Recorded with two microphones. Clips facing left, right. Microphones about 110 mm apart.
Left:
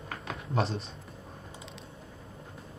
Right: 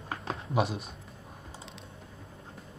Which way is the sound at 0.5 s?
10° right (ahead or behind).